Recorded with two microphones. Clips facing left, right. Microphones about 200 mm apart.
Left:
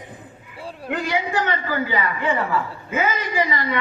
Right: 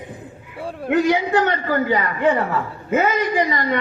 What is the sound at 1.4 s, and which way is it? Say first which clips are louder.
A woman's voice: right 4 dB; 50° right (ahead or behind).